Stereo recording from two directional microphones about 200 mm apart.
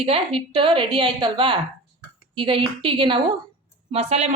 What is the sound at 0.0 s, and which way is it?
A woman's voice, 30° right (ahead or behind).